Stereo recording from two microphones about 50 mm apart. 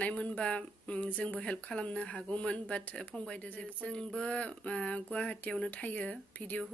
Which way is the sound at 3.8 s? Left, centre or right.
Left.